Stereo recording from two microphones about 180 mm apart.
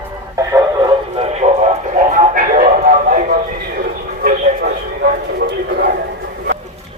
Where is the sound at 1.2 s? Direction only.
40° right (ahead or behind); by 5.9 s 60° right (ahead or behind).